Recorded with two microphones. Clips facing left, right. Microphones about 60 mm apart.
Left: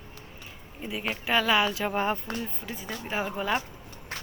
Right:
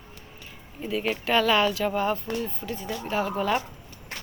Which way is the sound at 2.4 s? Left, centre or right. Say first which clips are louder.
Right 4 dB; centre.